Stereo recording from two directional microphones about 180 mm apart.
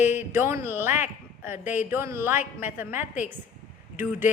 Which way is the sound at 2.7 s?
10° right (ahead or behind).